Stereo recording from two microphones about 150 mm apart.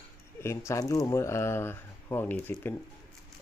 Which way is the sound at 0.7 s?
20° left (ahead or behind).